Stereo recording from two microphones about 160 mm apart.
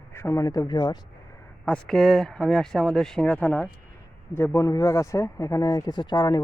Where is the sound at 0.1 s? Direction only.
15° left (ahead or behind).